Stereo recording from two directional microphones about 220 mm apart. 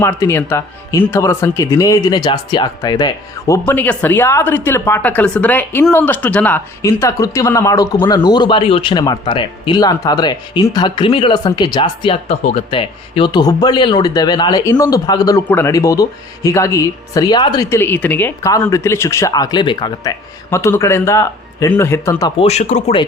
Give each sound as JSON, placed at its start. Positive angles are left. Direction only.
{"t": 0.0, "sound": "a woman's voice", "side_deg": 10}
{"t": 22.4, "sound": "speech", "side_deg": 30}